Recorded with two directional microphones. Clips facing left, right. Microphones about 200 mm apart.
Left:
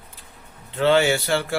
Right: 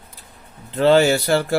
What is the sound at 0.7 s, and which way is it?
Speech, 40° right (ahead or behind).